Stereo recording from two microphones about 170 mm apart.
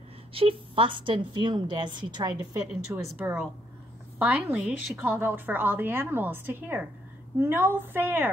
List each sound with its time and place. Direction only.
0.3 s a woman's voice: 35° right (ahead or behind)
2.5 s a woman's voice: 15° right (ahead or behind)